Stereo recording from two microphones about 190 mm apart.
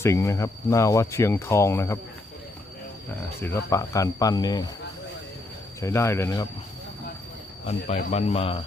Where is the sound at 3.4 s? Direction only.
15° left (ahead or behind).